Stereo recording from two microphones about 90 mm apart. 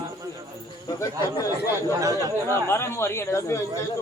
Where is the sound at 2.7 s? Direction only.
30° left (ahead or behind).